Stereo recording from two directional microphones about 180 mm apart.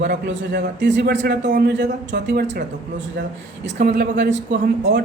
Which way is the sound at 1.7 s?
75° right (ahead or behind).